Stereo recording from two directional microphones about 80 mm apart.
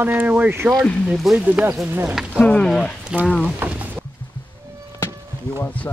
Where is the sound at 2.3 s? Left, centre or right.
Centre.